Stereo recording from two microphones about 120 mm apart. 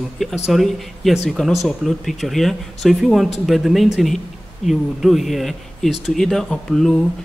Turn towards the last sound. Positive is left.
turn(degrees=5)  # may be behind; listen again after turning